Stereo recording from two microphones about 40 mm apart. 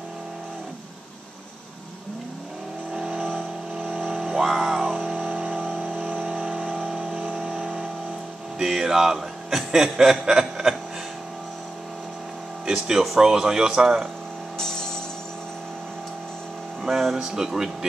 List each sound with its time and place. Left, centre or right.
2.9 s vehicle: centre
3.3 s vehicle: right
4.2 s a sound: centre
6.2 s a sound: centre
6.9 s vehicle: centre
7.2 s vehicle: right
7.5 s vehicle: centre
8.5 s speech: centre
12.6 s speech: centre
14.6 s music: centre
16.8 s speech: centre
17.2 s speech: centre